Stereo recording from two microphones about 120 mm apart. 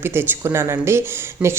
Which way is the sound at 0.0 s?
20° right (ahead or behind).